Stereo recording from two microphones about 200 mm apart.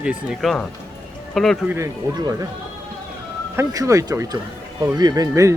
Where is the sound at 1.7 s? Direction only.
15° right (ahead or behind).